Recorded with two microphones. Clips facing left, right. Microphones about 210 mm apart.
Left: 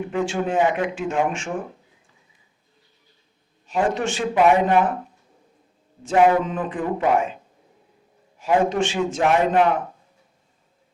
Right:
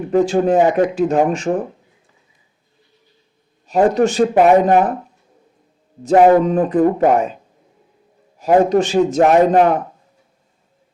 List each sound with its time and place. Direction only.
0.1 s speech: 40° right (ahead or behind)
3.7 s speech: 40° right (ahead or behind)
6.0 s speech: 40° right (ahead or behind)
8.4 s speech: 40° right (ahead or behind)